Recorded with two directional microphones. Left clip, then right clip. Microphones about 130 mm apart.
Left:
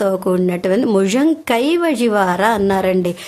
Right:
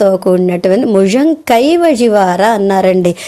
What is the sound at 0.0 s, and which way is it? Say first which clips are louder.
A woman's voice: right 7 dB; 20° right (ahead or behind).